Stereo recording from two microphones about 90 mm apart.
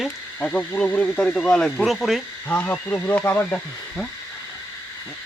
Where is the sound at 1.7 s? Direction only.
Centre (ahead or behind).